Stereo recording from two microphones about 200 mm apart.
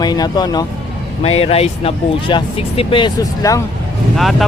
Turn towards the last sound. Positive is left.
turn(degrees=0)  # may be behind; listen again after turning